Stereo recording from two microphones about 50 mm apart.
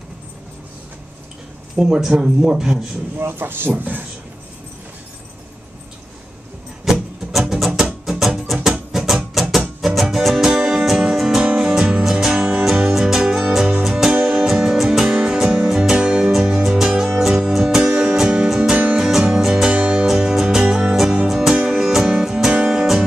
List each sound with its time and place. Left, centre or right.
1.8 s speech: centre
3.2 s speech: right
6.8 s music: centre